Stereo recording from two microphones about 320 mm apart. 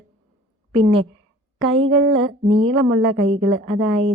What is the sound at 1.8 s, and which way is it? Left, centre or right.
A woman's voice, right.